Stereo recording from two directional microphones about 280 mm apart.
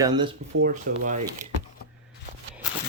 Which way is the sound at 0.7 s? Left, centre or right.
Right.